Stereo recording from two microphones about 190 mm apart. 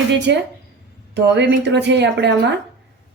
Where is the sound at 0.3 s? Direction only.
65° right (ahead or behind).